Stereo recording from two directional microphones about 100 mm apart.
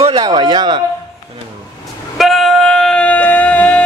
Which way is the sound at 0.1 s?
40° right (ahead or behind).